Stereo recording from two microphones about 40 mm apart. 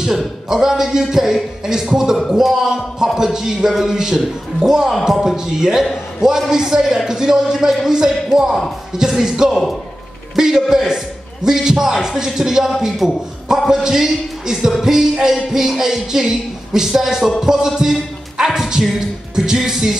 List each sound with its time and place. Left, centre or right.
0.5 s music: centre
8.9 s speech: centre
10.3 s a sound: centre
11.4 s music: centre
12.8 s a man's voice: centre
13.8 s music: centre